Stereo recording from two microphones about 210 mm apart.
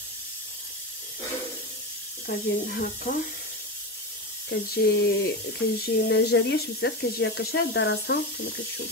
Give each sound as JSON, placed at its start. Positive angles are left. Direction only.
{"t": 2.2, "sound": "speech", "side_deg": 45}
{"t": 4.5, "sound": "speech", "side_deg": 55}